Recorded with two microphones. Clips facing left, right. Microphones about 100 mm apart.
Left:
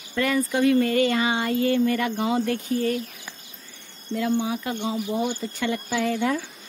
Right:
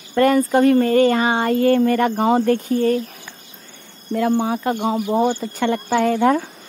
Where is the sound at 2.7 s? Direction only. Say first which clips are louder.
Right 5 dB; 35° right (ahead or behind).